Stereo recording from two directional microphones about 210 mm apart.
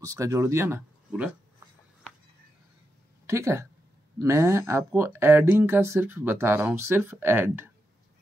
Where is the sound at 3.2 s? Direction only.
15° right (ahead or behind).